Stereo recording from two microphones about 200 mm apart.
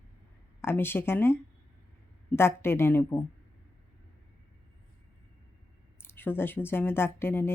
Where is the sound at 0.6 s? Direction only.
10° left (ahead or behind).